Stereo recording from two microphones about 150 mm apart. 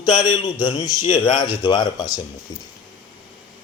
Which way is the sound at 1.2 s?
35° left (ahead or behind).